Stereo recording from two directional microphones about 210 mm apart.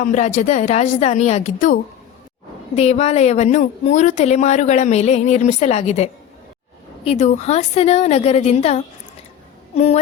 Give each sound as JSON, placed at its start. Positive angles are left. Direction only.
{"t": 0.0, "sound": "a woman's voice", "side_deg": 35}